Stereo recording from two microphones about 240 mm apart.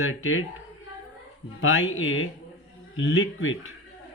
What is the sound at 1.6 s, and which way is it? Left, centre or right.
Speech, left.